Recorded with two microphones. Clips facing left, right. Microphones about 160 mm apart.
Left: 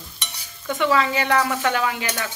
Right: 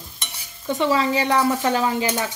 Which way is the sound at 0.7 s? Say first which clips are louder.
Right 1 dB; 30° right (ahead or behind).